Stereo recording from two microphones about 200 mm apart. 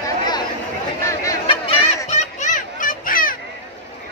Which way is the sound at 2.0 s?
40° left (ahead or behind).